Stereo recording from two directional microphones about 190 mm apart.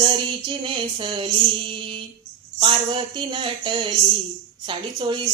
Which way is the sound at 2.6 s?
25° right (ahead or behind).